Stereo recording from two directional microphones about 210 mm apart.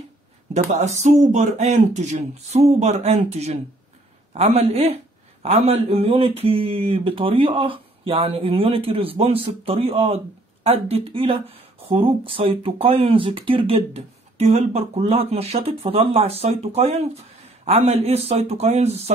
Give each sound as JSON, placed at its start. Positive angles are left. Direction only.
{"t": 0.5, "sound": "speech", "side_deg": -35}